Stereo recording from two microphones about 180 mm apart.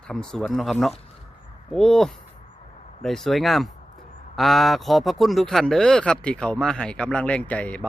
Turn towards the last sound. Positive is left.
turn(degrees=5)  # may be behind; listen again after turning